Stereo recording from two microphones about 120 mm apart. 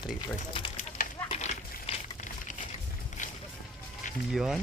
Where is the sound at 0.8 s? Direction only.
90° left.